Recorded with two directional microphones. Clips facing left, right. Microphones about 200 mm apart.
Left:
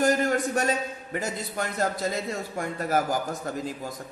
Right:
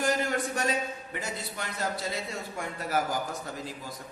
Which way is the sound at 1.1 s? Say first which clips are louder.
Left 6 dB; 45° left (ahead or behind).